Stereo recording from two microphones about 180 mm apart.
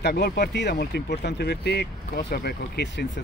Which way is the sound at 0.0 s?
65° left (ahead or behind).